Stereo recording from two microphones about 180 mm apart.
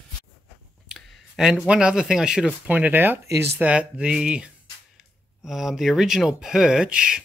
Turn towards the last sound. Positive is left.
turn(degrees=-5)  # may be behind; listen again after turning